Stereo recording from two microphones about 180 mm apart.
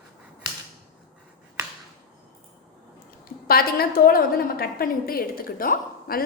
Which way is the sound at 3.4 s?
55° left (ahead or behind).